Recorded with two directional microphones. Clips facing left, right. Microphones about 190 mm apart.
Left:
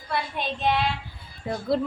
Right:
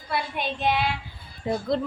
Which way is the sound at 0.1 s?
5° right (ahead or behind).